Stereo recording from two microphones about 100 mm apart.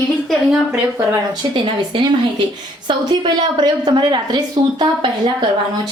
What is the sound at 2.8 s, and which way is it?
A woman's voice, 50° right (ahead or behind).